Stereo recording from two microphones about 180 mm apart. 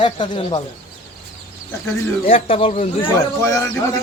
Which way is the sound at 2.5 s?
35° left (ahead or behind).